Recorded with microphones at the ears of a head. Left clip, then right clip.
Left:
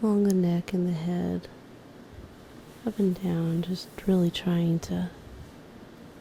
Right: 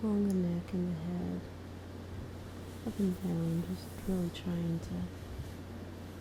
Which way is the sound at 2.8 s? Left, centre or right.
Left.